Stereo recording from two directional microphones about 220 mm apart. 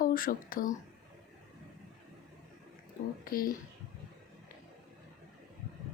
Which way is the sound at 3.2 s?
40° left (ahead or behind).